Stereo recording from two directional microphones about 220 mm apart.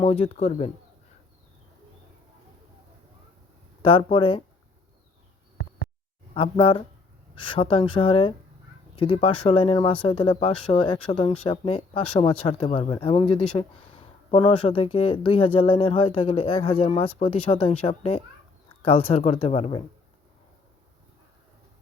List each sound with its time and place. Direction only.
0.0 s speech: 30° left (ahead or behind)
3.8 s speech: 25° left (ahead or behind)
6.3 s speech: 25° left (ahead or behind)